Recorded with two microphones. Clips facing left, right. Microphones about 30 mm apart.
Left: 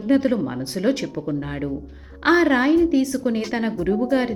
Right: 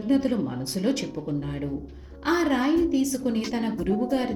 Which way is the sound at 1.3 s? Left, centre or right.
Left.